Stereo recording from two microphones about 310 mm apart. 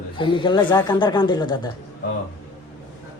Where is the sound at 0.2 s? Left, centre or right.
Centre.